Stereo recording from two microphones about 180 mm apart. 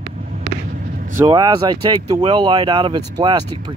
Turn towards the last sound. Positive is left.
turn(degrees=-25)  # may be behind; listen again after turning